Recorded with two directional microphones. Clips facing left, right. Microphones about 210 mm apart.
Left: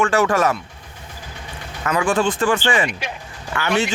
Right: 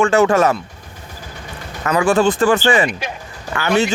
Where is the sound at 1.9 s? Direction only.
40° right (ahead or behind).